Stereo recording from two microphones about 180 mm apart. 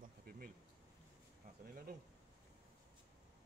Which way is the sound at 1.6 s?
55° right (ahead or behind).